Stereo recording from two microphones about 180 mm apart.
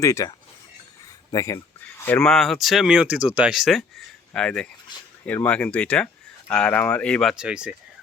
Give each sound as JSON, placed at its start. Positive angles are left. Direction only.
{"t": 0.0, "sound": "speech", "side_deg": 15}
{"t": 2.0, "sound": "speech", "side_deg": 10}